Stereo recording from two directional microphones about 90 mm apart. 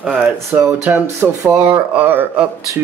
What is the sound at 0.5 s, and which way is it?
Speech, 15° right (ahead or behind).